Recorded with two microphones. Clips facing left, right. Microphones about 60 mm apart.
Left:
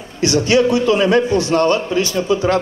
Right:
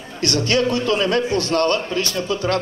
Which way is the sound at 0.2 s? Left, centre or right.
Centre.